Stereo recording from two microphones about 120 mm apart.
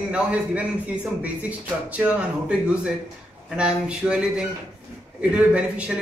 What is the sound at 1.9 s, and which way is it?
A man's voice, 10° right (ahead or behind).